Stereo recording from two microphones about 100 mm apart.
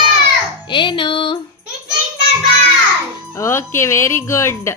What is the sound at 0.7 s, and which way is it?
Speech, 55° left (ahead or behind).